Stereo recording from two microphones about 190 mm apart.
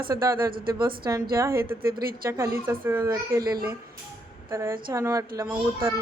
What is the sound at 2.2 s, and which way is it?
A child's voice, 15° right (ahead or behind).